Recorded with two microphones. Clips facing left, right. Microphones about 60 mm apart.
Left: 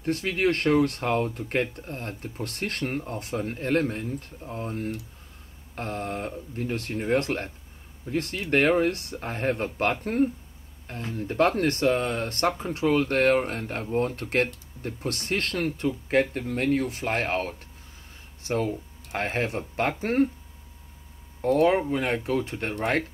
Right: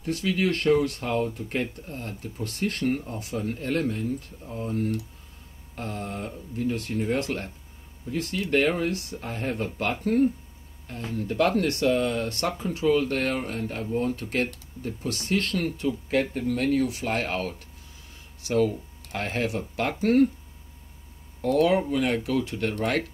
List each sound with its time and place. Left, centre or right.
0.0 s speech: left
21.4 s speech: left